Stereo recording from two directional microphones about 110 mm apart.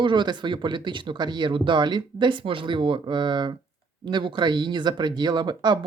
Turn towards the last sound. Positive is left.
turn(degrees=-40)  # may be behind; listen again after turning